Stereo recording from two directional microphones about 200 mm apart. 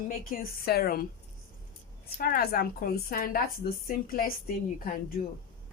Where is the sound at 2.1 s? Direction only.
50° left (ahead or behind).